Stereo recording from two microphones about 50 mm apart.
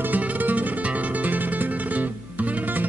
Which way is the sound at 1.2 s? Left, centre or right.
Right.